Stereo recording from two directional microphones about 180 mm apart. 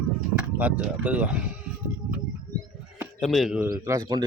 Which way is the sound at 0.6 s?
10° right (ahead or behind).